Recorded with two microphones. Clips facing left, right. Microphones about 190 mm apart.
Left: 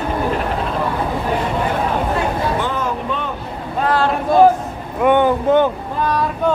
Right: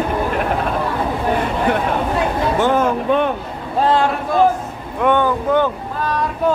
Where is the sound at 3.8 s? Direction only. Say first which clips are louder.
Right 2 dB; 25° right (ahead or behind).